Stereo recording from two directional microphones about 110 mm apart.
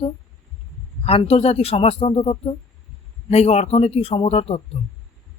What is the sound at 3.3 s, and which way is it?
Speech, 75° left (ahead or behind).